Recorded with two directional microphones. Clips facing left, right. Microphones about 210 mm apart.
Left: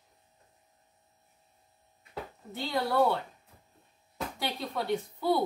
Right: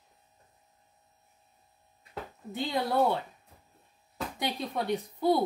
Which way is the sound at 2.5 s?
20° right (ahead or behind).